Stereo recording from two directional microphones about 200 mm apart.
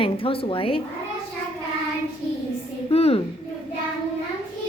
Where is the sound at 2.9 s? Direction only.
30° left (ahead or behind).